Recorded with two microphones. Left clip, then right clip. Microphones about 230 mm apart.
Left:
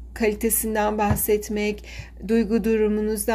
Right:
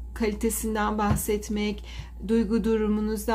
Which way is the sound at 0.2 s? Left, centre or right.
Right.